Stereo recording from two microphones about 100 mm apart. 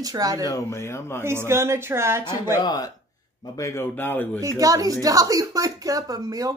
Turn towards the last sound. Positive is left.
turn(degrees=-35)  # may be behind; listen again after turning